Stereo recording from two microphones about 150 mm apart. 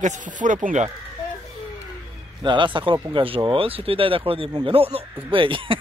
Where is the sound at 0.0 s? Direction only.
55° right (ahead or behind).